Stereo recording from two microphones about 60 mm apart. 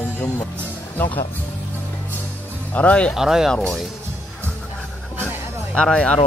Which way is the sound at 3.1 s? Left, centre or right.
Centre.